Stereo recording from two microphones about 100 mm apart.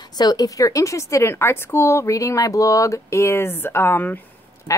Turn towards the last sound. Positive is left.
turn(degrees=35)  # may be behind; listen again after turning